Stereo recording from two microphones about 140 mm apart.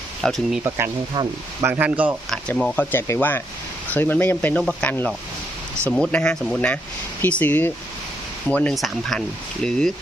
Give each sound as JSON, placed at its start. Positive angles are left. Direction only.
{"t": 0.2, "sound": "speech", "side_deg": 0}
{"t": 0.6, "sound": "speech", "side_deg": -20}
{"t": 1.6, "sound": "speech", "side_deg": -10}
{"t": 2.3, "sound": "speech", "side_deg": 5}